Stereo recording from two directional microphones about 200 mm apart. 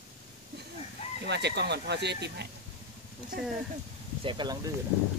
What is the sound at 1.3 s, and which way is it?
Speech, 55° right (ahead or behind).